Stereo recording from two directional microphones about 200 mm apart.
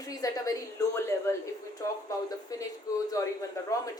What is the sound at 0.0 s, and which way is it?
Speech, 15° left (ahead or behind).